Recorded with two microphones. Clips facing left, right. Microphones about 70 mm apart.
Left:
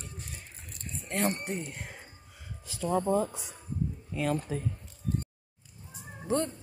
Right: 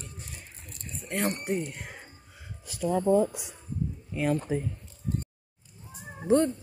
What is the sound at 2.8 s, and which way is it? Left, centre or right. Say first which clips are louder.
Speech: right 4 dB; centre.